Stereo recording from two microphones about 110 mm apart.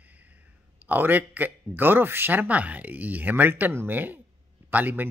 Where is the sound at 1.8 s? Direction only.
20° right (ahead or behind).